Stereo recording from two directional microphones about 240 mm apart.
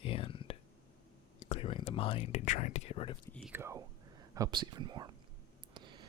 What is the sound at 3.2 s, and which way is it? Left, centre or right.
Speech, centre.